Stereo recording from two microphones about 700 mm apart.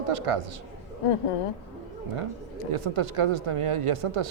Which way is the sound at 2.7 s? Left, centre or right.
Right.